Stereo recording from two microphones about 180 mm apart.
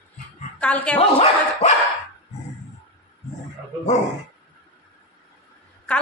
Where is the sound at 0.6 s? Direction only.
5° left (ahead or behind).